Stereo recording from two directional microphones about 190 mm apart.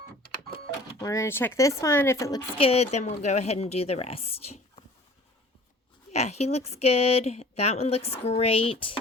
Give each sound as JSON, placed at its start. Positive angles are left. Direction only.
{"t": 1.0, "sound": "speech", "side_deg": 15}
{"t": 2.6, "sound": "a woman's voice", "side_deg": 30}
{"t": 6.1, "sound": "a woman's voice", "side_deg": 35}